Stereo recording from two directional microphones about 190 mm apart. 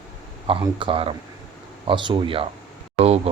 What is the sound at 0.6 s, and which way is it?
Speech, 25° right (ahead or behind).